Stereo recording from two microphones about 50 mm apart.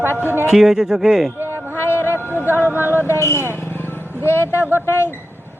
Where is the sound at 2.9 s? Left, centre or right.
Left.